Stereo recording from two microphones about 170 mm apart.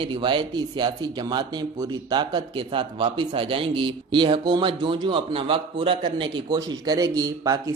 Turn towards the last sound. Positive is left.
turn(degrees=-20)  # may be behind; listen again after turning